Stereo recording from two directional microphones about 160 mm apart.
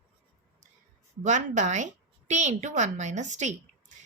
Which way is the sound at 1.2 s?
50° right (ahead or behind).